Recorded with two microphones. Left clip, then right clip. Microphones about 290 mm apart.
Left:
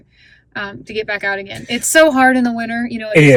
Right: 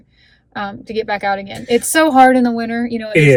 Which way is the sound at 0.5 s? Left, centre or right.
Centre.